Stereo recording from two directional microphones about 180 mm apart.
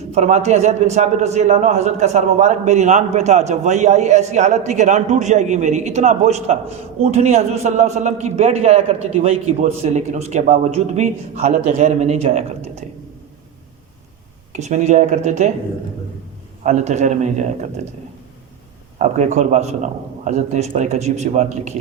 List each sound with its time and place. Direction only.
0.1 s a man's voice: 40° right (ahead or behind)
14.5 s a man's voice: 40° right (ahead or behind)
16.6 s a man's voice: 40° right (ahead or behind)
18.9 s a man's voice: 40° right (ahead or behind)